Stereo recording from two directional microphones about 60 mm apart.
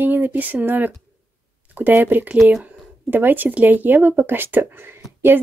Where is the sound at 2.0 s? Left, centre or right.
Right.